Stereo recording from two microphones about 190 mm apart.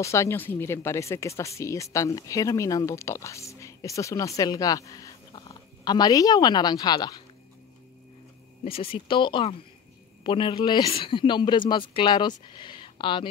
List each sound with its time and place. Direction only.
0.0 s speech: 15° left (ahead or behind)
8.6 s speech: 30° left (ahead or behind)